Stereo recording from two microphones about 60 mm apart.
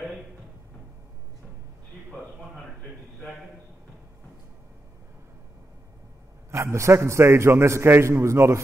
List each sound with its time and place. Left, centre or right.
6.5 s a man's voice: right